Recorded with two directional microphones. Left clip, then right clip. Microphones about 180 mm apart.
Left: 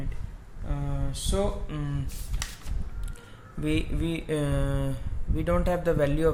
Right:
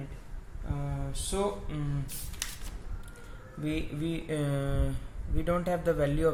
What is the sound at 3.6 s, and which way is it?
Speech, 35° left (ahead or behind).